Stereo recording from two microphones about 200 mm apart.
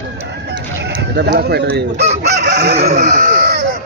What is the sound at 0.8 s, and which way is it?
Speech, 60° right (ahead or behind).